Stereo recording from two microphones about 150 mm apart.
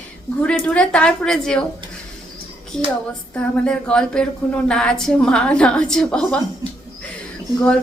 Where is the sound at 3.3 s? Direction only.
5° left (ahead or behind).